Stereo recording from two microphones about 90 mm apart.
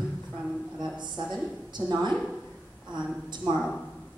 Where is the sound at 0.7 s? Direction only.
55° right (ahead or behind).